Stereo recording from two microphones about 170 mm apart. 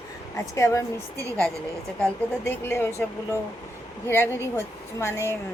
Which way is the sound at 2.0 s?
15° left (ahead or behind).